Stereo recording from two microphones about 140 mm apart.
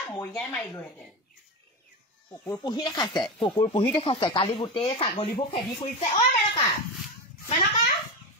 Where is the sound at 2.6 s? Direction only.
30° left (ahead or behind).